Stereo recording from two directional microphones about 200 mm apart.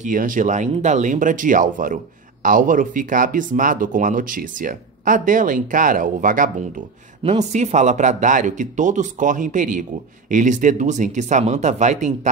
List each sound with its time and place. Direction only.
0.0 s speech: 40° right (ahead or behind)